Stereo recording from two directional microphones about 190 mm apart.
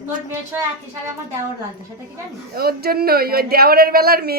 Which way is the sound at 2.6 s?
55° right (ahead or behind).